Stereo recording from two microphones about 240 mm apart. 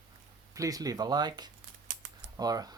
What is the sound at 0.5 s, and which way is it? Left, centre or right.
Speech, centre.